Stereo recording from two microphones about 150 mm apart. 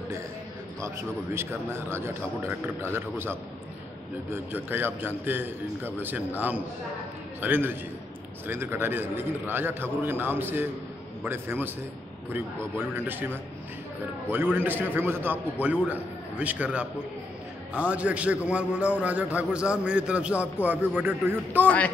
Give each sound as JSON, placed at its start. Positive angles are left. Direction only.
{"t": 0.7, "sound": "a man's voice", "side_deg": -20}
{"t": 7.4, "sound": "a man's voice", "side_deg": -15}
{"t": 12.7, "sound": "a man's voice", "side_deg": -15}
{"t": 14.3, "sound": "a man's voice", "side_deg": -10}
{"t": 21.6, "sound": "speech", "side_deg": 10}